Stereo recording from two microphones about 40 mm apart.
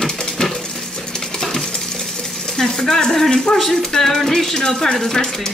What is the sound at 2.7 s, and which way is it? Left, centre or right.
Speech, centre.